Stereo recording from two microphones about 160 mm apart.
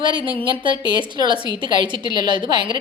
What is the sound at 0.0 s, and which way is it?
Speech, 30° right (ahead or behind).